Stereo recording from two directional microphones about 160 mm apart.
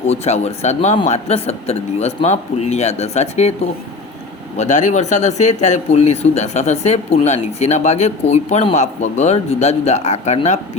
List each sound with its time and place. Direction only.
0.1 s speech: 40° left (ahead or behind)
4.5 s speech: 45° left (ahead or behind)